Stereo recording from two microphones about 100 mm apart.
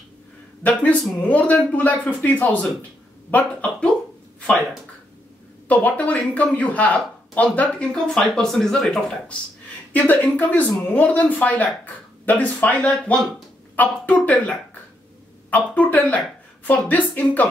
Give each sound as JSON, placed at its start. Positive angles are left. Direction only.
{"t": 0.6, "sound": "speech", "side_deg": 15}
{"t": 5.7, "sound": "speech", "side_deg": 15}
{"t": 9.9, "sound": "a woman's voice", "side_deg": 15}